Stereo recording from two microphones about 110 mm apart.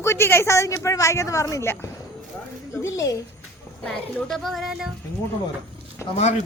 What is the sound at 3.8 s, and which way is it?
Speech, 5° left (ahead or behind).